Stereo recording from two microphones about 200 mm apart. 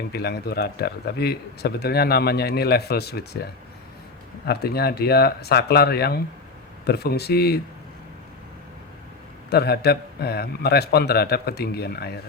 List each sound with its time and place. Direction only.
0.1 s speech: 55° left (ahead or behind)
4.4 s speech: 55° left (ahead or behind)
9.5 s speech: 55° left (ahead or behind)